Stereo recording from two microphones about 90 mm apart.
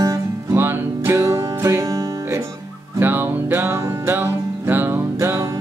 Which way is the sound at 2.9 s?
25° right (ahead or behind).